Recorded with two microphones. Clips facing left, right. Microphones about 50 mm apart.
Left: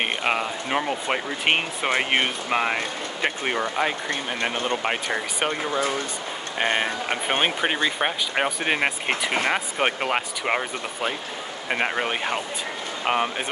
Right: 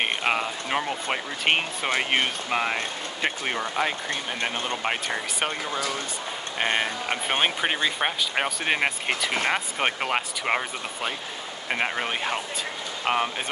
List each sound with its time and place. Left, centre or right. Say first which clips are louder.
0.0 s speech: left 1 dB; centre
4.8 s speech: left 2 dB; centre
5.5 s speech: left 4 dB; left
6.6 s speech: left 2 dB; centre